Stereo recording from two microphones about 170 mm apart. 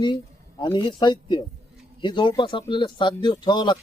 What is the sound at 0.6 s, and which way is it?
Speech, 30° left (ahead or behind).